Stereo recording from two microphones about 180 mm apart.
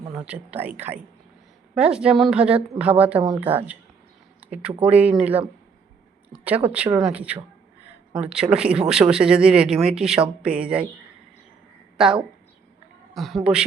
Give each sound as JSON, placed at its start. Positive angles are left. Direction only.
{"t": 0.3, "sound": "speech", "side_deg": -10}
{"t": 4.4, "sound": "a sound", "side_deg": -10}
{"t": 4.8, "sound": "speech", "side_deg": -10}
{"t": 11.9, "sound": "a woman's voice", "side_deg": -5}